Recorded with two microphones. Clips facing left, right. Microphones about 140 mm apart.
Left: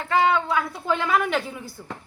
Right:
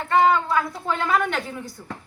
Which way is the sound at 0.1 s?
Centre (ahead or behind).